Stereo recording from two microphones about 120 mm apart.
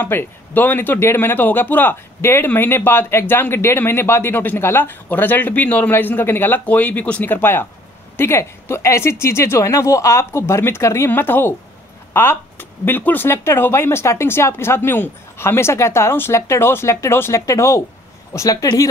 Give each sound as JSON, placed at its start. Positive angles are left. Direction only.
{"t": 0.0, "sound": "speech", "side_deg": 15}